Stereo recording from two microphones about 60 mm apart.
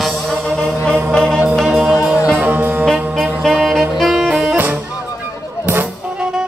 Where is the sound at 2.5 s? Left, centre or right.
Right.